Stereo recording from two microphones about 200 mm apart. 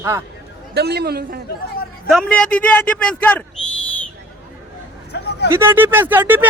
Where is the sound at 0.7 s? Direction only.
55° right (ahead or behind).